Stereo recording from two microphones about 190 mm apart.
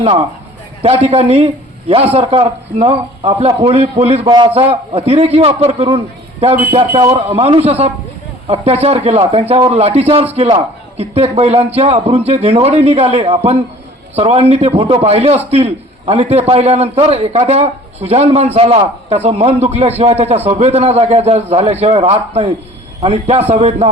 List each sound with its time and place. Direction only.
0.8 s a man's voice: 30° right (ahead or behind)